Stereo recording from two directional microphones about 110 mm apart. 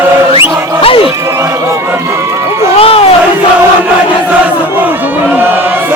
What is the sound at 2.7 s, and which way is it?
Speech, 60° left (ahead or behind).